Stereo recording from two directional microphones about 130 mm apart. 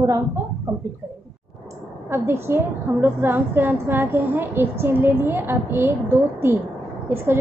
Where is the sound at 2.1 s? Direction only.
20° right (ahead or behind).